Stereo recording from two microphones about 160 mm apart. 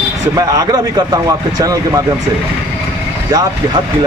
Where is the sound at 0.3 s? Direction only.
20° right (ahead or behind).